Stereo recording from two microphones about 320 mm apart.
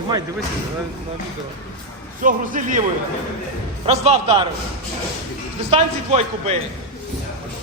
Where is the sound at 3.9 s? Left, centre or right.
Centre.